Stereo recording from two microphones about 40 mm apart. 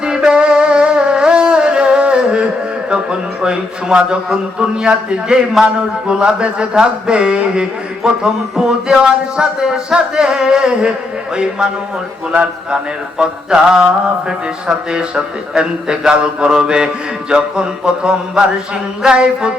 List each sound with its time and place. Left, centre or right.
0.0 s music: centre
2.9 s mantra: right
5.6 s a man's voice: centre
6.1 s mantra: right
9.4 s mantra: centre
12.7 s mantra: centre